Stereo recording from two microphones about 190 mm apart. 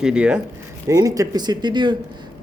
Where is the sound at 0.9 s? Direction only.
20° right (ahead or behind).